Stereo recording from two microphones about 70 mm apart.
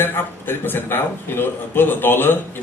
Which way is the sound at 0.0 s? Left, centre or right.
Left.